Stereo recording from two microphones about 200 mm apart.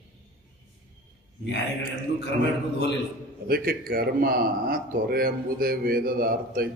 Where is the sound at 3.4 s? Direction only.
50° right (ahead or behind).